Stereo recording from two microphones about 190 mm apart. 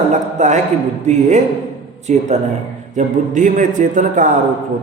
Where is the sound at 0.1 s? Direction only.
40° right (ahead or behind).